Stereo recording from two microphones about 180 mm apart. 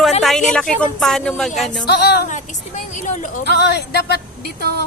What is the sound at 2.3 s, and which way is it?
A woman's voice, 45° left (ahead or behind).